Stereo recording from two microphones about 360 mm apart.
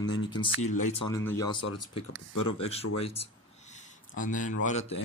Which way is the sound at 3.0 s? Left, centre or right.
Centre.